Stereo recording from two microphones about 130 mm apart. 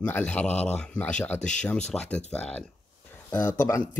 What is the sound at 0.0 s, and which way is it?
Speech, 15° left (ahead or behind).